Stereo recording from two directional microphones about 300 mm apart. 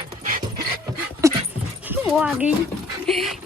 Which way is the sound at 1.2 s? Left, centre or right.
Centre.